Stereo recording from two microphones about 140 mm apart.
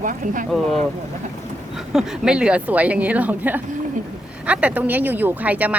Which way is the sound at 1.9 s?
5° right (ahead or behind).